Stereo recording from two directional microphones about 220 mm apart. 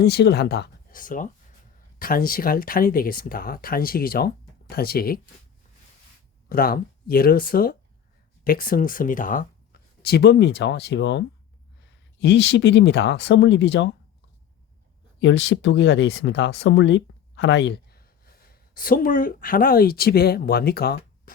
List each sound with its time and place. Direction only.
0.0 s speech: 50° left (ahead or behind)
6.5 s speech: 40° left (ahead or behind)
15.2 s speech: 55° left (ahead or behind)